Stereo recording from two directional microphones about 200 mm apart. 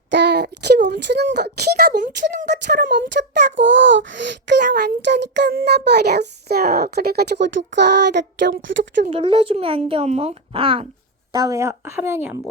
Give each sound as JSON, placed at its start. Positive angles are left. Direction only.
{"t": 0.1, "sound": "a child's voice", "side_deg": -60}
{"t": 3.2, "sound": "a child's voice", "side_deg": -65}
{"t": 9.0, "sound": "a child's voice", "side_deg": -25}
{"t": 11.3, "sound": "speech", "side_deg": -20}